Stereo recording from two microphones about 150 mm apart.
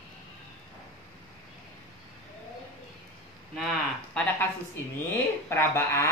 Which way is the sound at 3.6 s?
Centre (ahead or behind).